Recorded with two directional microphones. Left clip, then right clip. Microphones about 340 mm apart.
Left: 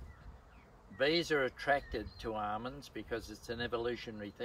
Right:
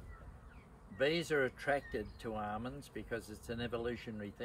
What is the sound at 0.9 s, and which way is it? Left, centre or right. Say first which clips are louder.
Speech: left 2 dB; centre.